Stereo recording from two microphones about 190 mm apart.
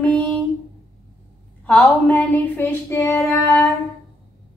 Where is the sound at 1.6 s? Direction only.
5° left (ahead or behind).